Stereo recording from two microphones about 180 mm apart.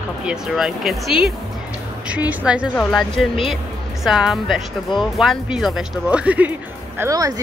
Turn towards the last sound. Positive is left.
turn(degrees=-20)  # may be behind; listen again after turning